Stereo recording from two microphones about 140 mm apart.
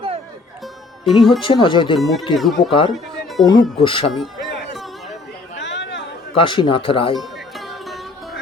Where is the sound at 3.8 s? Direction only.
40° left (ahead or behind).